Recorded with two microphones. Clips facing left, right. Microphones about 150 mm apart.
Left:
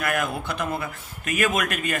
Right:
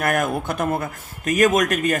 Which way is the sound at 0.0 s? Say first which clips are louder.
Right 5 dB; 45° right (ahead or behind).